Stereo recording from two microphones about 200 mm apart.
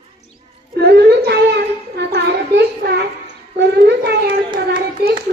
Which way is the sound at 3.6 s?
55° right (ahead or behind).